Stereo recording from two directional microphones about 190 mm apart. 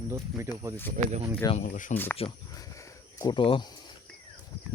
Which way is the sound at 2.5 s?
15° left (ahead or behind).